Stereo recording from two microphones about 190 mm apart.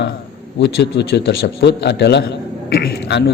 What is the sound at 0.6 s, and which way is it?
A man's voice, 60° left (ahead or behind).